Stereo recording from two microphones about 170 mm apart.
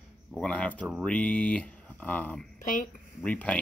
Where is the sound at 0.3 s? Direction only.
5° left (ahead or behind).